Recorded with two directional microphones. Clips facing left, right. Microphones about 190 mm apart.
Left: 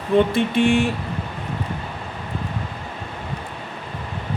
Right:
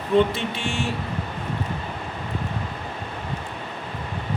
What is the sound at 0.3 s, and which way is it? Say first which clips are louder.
Speech: left 10 dB; 55° left (ahead or behind).